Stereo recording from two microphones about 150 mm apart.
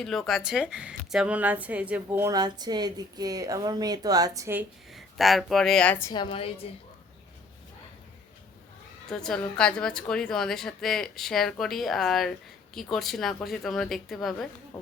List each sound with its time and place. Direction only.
0.0 s a woman's voice: centre (ahead or behind); by 2.3 s 15° right (ahead or behind)
2.3 s speech: 25° right (ahead or behind)
4.9 s speech: centre (ahead or behind)
6.1 s a woman's voice: 35° left (ahead or behind)
9.0 s a woman's voice: 5° left (ahead or behind)